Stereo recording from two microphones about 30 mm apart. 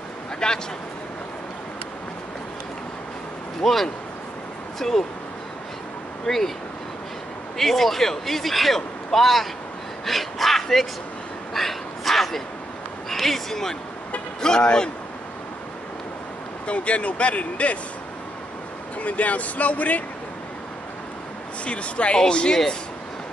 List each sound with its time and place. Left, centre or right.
0.4 s speech: left
3.6 s speech: centre
6.2 s speech: centre
7.5 s speech: centre
11.5 s a sound: centre
13.1 s speech: centre
16.6 s speech: left
18.9 s speech: left
21.6 s speech: left
22.1 s speech: left